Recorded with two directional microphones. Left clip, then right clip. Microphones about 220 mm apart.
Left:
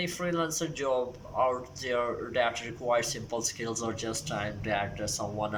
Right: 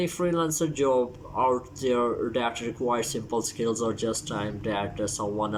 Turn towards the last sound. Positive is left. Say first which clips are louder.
# right 4 dB
turn(degrees=-5)  # may be behind; listen again after turning